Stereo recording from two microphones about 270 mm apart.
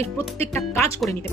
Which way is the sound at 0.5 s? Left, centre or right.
Centre.